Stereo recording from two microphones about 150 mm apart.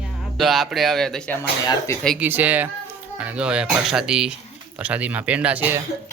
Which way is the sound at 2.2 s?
10° right (ahead or behind).